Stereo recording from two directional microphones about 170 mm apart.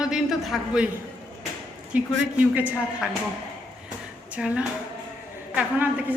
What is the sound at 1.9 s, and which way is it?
A woman's voice, 10° right (ahead or behind).